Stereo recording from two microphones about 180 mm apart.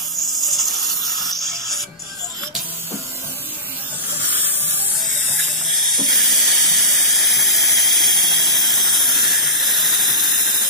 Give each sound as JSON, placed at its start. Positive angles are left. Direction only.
{"t": 0.3, "sound": "music", "side_deg": 0}
{"t": 5.7, "sound": "steam", "side_deg": 0}